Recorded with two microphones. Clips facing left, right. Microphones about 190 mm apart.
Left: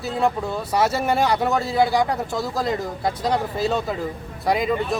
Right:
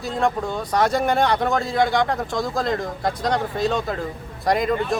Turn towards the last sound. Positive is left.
turn(degrees=5)  # may be behind; listen again after turning